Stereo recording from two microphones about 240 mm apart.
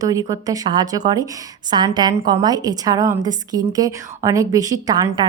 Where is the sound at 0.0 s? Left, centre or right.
Centre.